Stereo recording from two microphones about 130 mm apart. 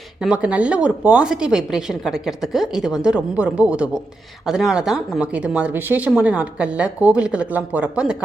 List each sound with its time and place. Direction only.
0.2 s speech: 10° right (ahead or behind)